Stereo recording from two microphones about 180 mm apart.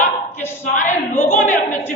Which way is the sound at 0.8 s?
45° left (ahead or behind).